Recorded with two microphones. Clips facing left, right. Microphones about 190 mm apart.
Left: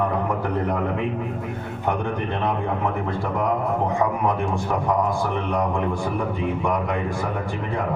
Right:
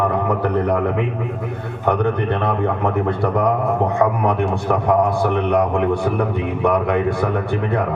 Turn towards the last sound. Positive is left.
turn(degrees=-65)  # may be behind; listen again after turning